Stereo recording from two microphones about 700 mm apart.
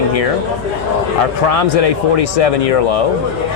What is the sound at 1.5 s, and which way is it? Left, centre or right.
Speech, left.